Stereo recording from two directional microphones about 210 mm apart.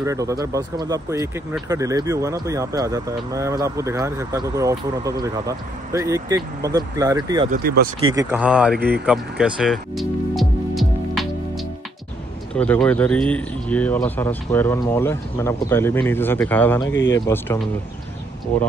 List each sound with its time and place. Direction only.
0.0 s speech: 15° right (ahead or behind)
7.5 s speech: 45° right (ahead or behind)
8.1 s speech: 15° right (ahead or behind)
8.4 s speech: 5° right (ahead or behind)
8.7 s speech: 45° right (ahead or behind)
9.0 s music: 5° right (ahead or behind)
12.5 s speech: 5° left (ahead or behind)